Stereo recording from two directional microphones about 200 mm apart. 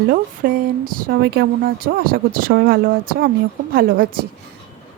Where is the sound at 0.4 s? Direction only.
45° right (ahead or behind).